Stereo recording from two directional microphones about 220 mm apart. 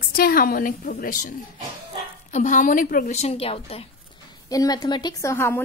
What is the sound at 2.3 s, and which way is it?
A woman's voice, 35° left (ahead or behind).